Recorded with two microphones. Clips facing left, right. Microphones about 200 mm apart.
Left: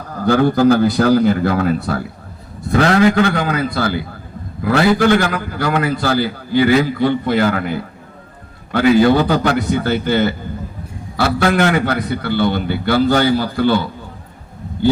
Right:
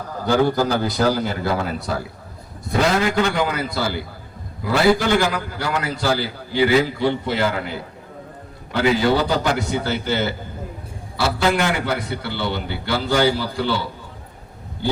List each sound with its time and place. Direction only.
0.3 s a man's voice: 55° left (ahead or behind)